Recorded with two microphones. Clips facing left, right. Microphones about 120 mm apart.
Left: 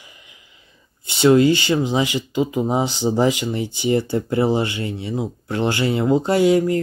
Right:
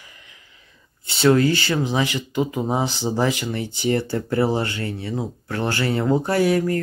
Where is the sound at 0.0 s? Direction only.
15° left (ahead or behind).